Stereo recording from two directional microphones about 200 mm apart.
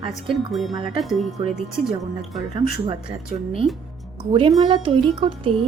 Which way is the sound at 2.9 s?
25° right (ahead or behind).